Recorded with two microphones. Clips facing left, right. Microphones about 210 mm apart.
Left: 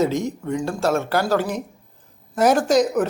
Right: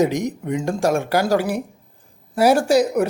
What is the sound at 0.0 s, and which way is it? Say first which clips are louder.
Speech: right 2 dB; 15° right (ahead or behind).